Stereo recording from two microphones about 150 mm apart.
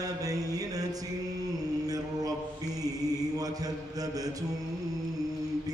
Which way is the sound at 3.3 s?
25° right (ahead or behind).